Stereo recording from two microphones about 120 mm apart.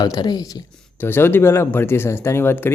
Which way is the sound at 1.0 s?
15° left (ahead or behind).